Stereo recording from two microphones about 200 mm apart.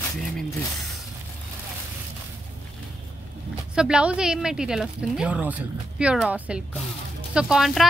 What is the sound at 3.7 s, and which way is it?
Speech, 5° right (ahead or behind).